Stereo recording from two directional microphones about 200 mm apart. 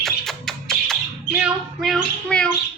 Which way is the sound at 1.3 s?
5° right (ahead or behind).